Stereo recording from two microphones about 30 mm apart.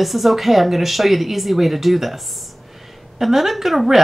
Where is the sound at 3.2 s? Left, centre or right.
Centre.